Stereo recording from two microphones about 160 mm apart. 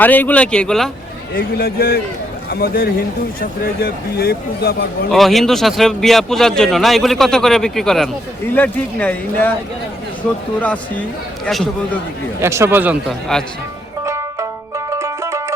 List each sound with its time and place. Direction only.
0.0 s speech: 10° left (ahead or behind)
1.4 s speech: 75° left (ahead or behind)
5.1 s a man's voice: centre (ahead or behind)
10.6 s a man's voice: 10° left (ahead or behind)
12.4 s a man's voice: 15° right (ahead or behind)
13.1 s a man's voice: 5° left (ahead or behind)
14.0 s music: 20° right (ahead or behind)